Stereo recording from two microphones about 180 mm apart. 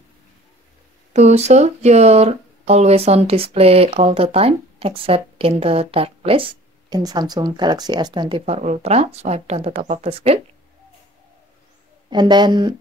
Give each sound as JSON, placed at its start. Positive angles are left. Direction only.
{"t": 1.1, "sound": "speech", "side_deg": -40}
{"t": 12.1, "sound": "a woman's voice", "side_deg": -25}